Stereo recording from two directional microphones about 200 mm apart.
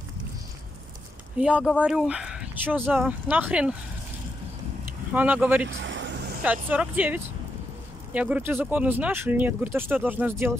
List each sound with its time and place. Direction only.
1.4 s speech: 5° right (ahead or behind)
5.1 s speech: 5° right (ahead or behind)
5.7 s vehicle: 65° right (ahead or behind)
6.4 s speech: 5° right (ahead or behind)